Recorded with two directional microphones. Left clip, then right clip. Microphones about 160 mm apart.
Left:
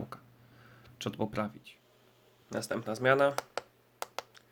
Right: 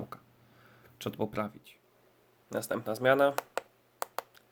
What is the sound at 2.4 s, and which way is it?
Speech, 20° right (ahead or behind).